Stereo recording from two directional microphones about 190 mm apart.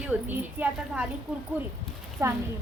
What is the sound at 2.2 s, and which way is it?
Speech, 15° right (ahead or behind).